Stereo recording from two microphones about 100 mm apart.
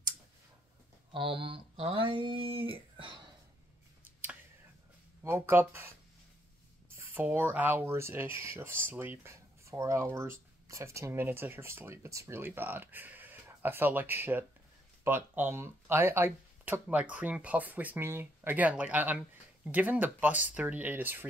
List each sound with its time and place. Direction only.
1.1 s speech: 60° right (ahead or behind)
5.2 s speech: 25° right (ahead or behind)
7.0 s speech: 20° right (ahead or behind)